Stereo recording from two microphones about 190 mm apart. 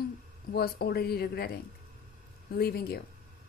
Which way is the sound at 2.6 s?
55° left (ahead or behind).